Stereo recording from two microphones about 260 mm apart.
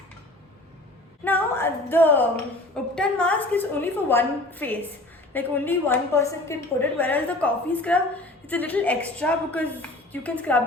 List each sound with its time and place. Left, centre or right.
1.2 s a woman's voice: centre